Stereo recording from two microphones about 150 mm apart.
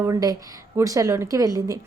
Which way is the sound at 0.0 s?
25° right (ahead or behind).